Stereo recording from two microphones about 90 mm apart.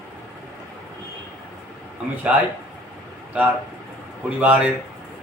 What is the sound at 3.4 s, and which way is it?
A man's voice, 20° right (ahead or behind).